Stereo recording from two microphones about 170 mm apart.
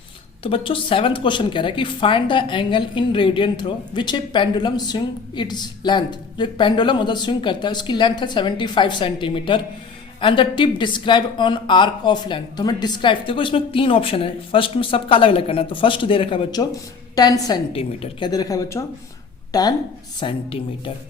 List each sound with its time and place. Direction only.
0.4 s a woman's voice: 30° left (ahead or behind)
17.7 s speech: 35° left (ahead or behind)
18.3 s a woman's voice: 20° left (ahead or behind)